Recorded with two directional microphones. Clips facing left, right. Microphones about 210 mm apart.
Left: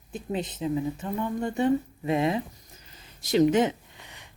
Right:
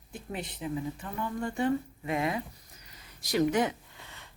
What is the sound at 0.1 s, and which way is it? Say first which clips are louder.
Speech: left 7 dB; 20° left (ahead or behind).